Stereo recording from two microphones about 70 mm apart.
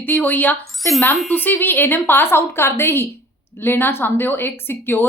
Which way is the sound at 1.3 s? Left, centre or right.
Left.